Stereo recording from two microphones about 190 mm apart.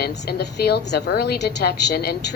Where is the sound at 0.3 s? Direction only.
60° left (ahead or behind).